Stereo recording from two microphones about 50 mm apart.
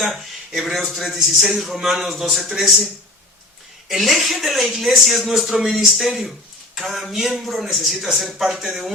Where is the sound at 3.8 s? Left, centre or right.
Centre.